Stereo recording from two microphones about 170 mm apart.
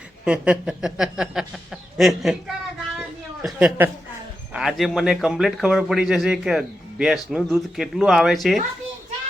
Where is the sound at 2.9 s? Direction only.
5° right (ahead or behind).